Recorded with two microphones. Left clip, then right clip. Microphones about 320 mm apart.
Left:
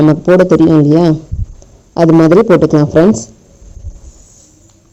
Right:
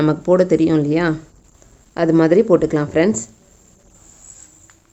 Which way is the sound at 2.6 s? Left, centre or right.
Centre.